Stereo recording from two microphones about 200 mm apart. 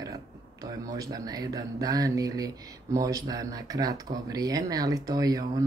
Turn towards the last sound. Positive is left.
turn(degrees=-20)  # may be behind; listen again after turning